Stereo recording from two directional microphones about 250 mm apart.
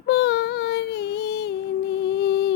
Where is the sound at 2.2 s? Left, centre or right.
Left.